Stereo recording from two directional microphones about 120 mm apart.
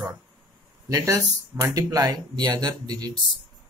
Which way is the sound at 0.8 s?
25° right (ahead or behind).